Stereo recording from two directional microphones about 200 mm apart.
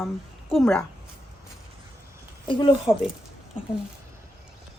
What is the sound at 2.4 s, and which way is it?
Speech, 25° left (ahead or behind).